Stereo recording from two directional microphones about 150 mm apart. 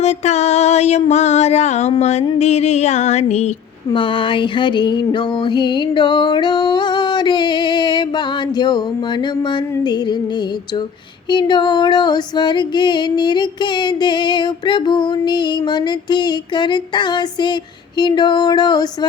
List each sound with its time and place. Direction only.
0.0 s a sound: 50° left (ahead or behind)
3.9 s music: 35° left (ahead or behind)
9.5 s female singing: 30° left (ahead or behind)
11.3 s female singing: 30° left (ahead or behind)